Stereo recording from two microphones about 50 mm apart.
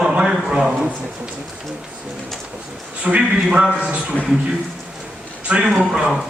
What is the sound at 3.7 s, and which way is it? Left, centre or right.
Speech, right.